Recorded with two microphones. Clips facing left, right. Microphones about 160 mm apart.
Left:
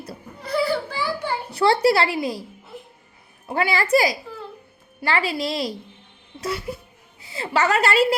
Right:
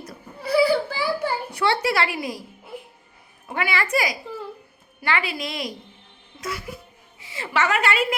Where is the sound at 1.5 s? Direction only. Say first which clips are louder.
Left 6 dB; 35° left (ahead or behind).